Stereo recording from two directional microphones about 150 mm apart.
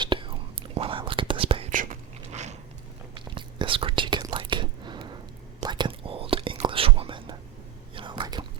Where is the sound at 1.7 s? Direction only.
60° right (ahead or behind).